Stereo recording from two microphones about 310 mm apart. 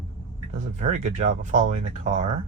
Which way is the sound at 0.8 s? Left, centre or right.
Right.